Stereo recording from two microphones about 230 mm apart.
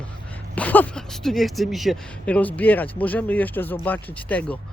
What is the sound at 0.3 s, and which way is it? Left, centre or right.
Speech, centre.